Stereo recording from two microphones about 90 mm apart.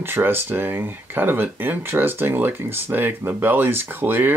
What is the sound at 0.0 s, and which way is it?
Speech, 25° right (ahead or behind).